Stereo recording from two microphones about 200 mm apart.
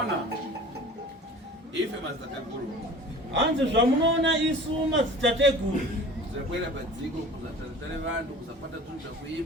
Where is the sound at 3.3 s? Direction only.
65° right (ahead or behind).